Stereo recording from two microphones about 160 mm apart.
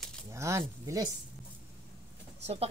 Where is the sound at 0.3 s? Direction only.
20° right (ahead or behind).